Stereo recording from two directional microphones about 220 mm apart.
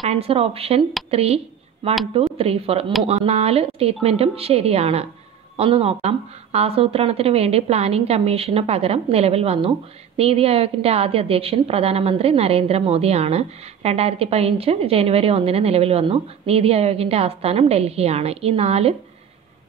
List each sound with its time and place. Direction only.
0.1 s a woman's voice: 25° right (ahead or behind)